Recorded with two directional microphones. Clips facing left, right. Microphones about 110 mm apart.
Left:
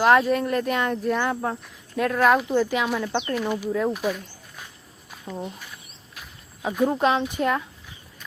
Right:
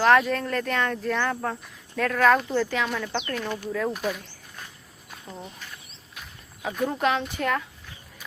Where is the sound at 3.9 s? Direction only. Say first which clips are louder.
Left 3 dB; centre (ahead or behind).